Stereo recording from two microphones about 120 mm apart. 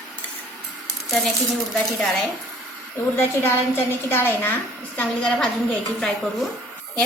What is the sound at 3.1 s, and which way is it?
A woman's voice, 20° left (ahead or behind).